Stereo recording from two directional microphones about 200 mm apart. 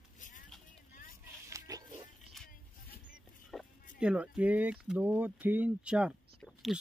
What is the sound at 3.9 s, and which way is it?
Speech, 5° right (ahead or behind).